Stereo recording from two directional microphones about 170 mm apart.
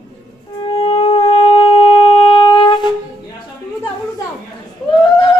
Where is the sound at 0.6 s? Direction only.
35° left (ahead or behind).